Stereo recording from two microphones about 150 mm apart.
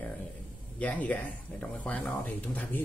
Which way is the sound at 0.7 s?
10° left (ahead or behind).